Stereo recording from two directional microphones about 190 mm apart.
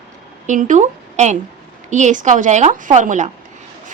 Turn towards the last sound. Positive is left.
turn(degrees=-40)  # may be behind; listen again after turning